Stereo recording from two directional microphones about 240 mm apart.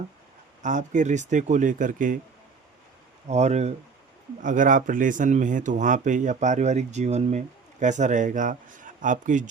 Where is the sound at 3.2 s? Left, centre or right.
Right.